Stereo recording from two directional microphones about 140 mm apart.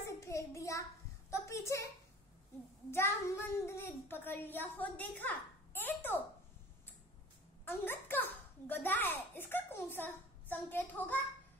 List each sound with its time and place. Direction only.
0.0 s a sound: 20° left (ahead or behind)
1.3 s a woman's voice: 20° left (ahead or behind)
2.9 s a child's voice: 15° left (ahead or behind)
7.6 s a child's voice: 15° left (ahead or behind)